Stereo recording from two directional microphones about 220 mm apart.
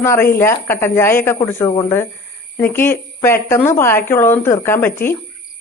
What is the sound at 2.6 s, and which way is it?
A woman's voice, 10° left (ahead or behind).